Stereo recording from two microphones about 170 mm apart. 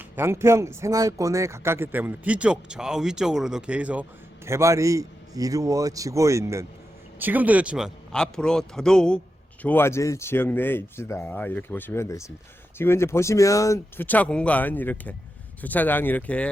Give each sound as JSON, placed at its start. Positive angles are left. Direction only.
{"t": 0.0, "sound": "a man's voice", "side_deg": -15}